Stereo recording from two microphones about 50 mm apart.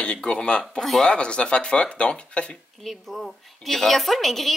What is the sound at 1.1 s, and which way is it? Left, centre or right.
Speech, centre.